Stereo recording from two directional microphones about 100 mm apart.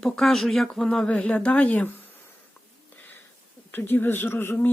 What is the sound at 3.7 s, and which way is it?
Speech, 20° left (ahead or behind).